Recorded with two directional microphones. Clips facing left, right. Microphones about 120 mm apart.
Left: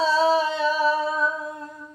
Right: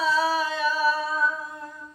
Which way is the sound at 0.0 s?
25° left (ahead or behind).